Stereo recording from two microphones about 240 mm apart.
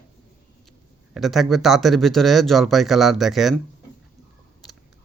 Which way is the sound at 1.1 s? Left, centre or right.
Centre.